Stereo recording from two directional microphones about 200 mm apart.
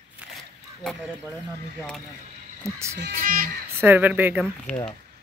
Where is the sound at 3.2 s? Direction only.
45° right (ahead or behind).